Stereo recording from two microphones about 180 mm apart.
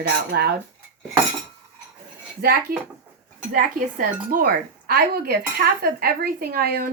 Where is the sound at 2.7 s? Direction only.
55° right (ahead or behind).